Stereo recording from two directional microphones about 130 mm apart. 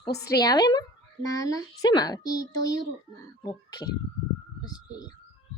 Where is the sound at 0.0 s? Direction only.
30° left (ahead or behind).